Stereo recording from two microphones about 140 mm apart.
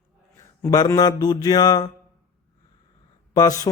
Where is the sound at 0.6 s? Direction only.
25° left (ahead or behind).